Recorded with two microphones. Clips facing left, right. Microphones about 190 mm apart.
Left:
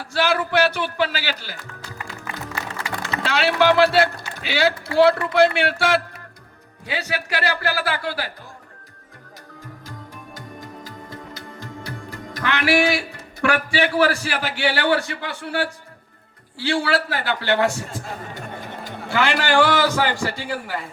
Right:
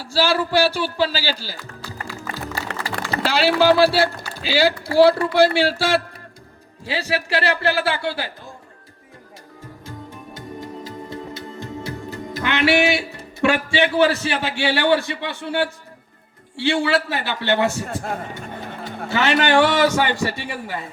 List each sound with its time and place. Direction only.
0.0 s speech: 30° right (ahead or behind)
2.1 s music: 35° right (ahead or behind)
3.1 s a man's voice: 35° right (ahead or behind)
9.8 s music: 25° right (ahead or behind)
16.6 s a man's voice: 20° right (ahead or behind)
19.2 s a man's voice: 20° right (ahead or behind)